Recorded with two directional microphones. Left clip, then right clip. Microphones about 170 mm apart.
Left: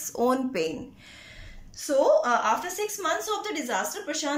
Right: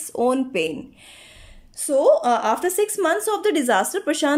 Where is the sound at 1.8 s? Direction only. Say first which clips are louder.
Right 5 dB; 30° right (ahead or behind).